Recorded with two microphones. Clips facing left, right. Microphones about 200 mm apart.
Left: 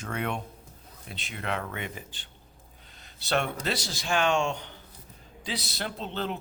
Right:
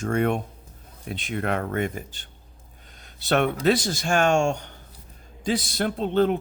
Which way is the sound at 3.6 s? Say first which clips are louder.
Right 10 dB; 50° right (ahead or behind).